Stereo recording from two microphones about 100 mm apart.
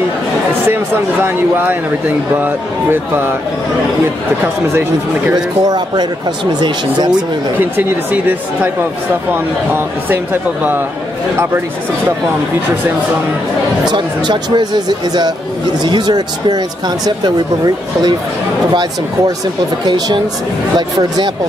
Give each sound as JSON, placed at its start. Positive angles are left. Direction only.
{"t": 0.7, "sound": "speech", "side_deg": -20}
{"t": 5.3, "sound": "speech", "side_deg": -45}
{"t": 7.5, "sound": "speech", "side_deg": -20}
{"t": 13.8, "sound": "speech", "side_deg": -50}
{"t": 20.7, "sound": "speech", "side_deg": -45}